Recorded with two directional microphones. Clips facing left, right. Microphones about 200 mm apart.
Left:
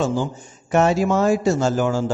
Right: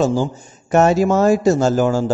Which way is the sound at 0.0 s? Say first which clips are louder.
Right 4 dB; 40° right (ahead or behind).